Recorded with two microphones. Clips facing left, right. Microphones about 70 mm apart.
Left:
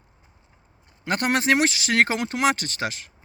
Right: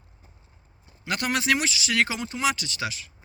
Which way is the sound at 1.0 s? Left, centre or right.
Left.